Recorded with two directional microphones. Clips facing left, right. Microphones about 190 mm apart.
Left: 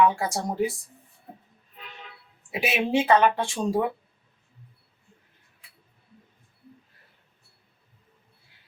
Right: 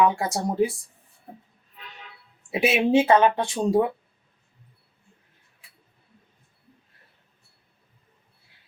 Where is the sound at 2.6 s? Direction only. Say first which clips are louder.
Right 5 dB; 25° right (ahead or behind).